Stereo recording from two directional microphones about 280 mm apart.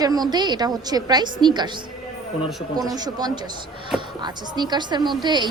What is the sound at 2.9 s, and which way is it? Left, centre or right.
A woman's voice, centre.